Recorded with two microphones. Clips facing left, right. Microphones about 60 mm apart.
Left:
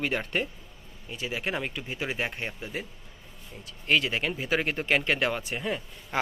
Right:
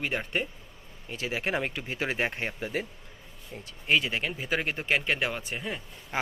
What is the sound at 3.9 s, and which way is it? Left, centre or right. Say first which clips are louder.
Speech: left 1 dB; centre.